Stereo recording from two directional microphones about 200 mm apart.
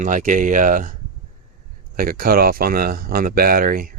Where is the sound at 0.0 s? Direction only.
40° right (ahead or behind).